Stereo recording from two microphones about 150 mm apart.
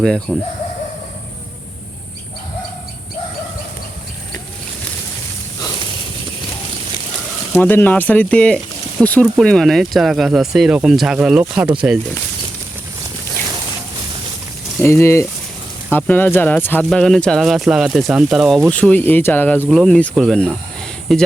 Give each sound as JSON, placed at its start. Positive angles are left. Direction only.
{"t": 0.0, "sound": "speech", "side_deg": 5}
{"t": 7.6, "sound": "speech", "side_deg": 15}
{"t": 14.8, "sound": "speech", "side_deg": 15}